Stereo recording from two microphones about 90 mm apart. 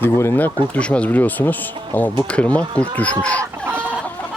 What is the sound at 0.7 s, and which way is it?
Speech, 10° left (ahead or behind).